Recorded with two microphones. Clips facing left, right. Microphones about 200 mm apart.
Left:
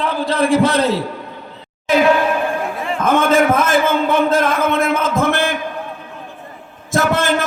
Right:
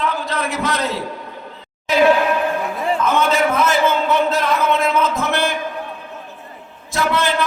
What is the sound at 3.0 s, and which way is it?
A man's voice, 50° left (ahead or behind).